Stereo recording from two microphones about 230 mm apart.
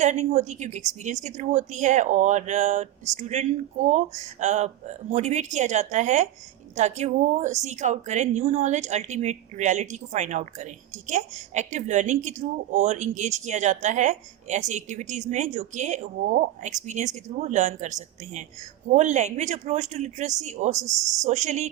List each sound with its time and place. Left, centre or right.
0.0 s speech: right
20.7 s speech: centre
21.2 s speech: right